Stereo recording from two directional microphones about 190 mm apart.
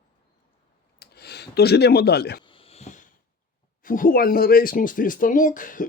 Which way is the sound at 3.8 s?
45° left (ahead or behind).